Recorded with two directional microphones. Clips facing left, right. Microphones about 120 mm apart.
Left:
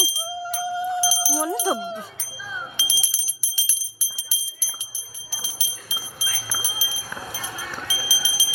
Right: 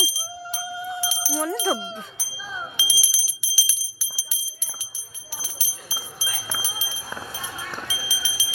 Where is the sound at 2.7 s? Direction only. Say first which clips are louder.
Right 1 dB; 10° right (ahead or behind).